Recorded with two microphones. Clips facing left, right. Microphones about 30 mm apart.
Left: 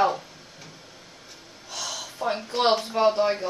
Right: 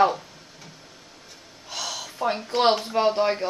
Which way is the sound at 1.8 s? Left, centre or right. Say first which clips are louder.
Right 2 dB; right.